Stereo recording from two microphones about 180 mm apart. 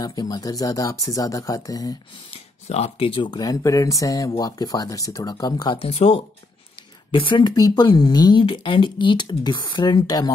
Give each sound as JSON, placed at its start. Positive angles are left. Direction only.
{"t": 0.0, "sound": "speech", "side_deg": 20}
{"t": 2.3, "sound": "speech", "side_deg": 35}